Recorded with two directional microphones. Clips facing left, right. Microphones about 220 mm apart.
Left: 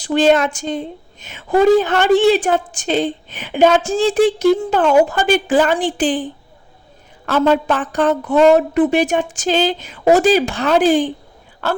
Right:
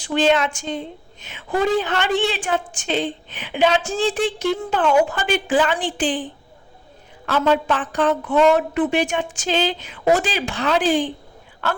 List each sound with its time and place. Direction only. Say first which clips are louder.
0.0 s a woman's voice: left 5 dB; 40° left (ahead or behind)
7.3 s a woman's voice: left 4 dB; 45° left (ahead or behind)